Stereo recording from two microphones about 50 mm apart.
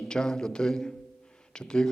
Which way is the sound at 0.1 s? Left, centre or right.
Centre.